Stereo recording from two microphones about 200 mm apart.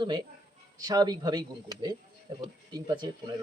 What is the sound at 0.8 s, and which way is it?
Speech, 20° right (ahead or behind).